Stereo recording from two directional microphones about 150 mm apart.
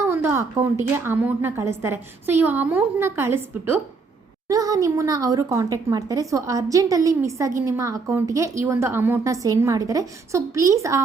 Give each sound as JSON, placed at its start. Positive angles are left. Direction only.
{"t": 0.0, "sound": "a woman's voice", "side_deg": -15}